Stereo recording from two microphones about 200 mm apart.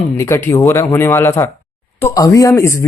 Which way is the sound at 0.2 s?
10° left (ahead or behind).